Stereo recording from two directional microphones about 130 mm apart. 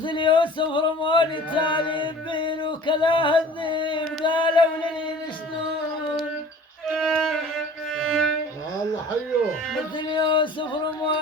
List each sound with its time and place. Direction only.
0.0 s male singing: 40° left (ahead or behind)
6.9 s violin: 5° left (ahead or behind)
7.9 s music: 5° left (ahead or behind)
10.1 s music: 40° left (ahead or behind)